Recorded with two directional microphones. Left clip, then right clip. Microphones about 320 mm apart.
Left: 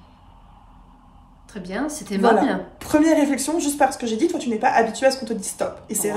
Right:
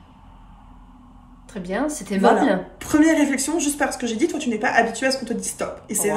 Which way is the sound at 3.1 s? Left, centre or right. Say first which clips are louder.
Left 1 dB; left.